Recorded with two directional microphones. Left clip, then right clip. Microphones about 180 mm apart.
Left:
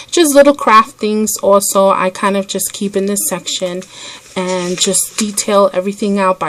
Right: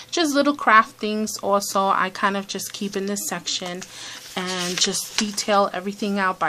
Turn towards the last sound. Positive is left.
turn(degrees=35)  # may be behind; listen again after turning